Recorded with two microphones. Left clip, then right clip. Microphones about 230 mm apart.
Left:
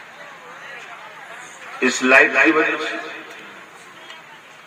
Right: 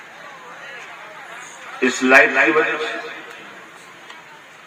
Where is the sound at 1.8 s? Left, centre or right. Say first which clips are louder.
Right 1 dB; left.